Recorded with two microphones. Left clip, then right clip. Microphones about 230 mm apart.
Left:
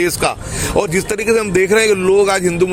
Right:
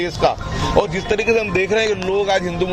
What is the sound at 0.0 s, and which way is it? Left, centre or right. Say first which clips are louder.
A man's voice: left 1 dB; left.